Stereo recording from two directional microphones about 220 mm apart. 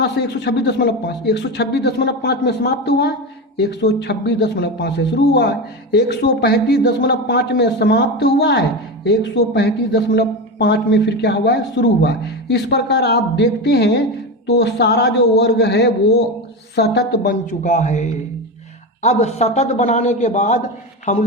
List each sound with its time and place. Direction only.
0.0 s a man's voice: 50° left (ahead or behind)
17.4 s a man's voice: 30° left (ahead or behind)